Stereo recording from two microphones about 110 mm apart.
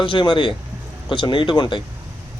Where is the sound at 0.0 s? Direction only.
50° left (ahead or behind).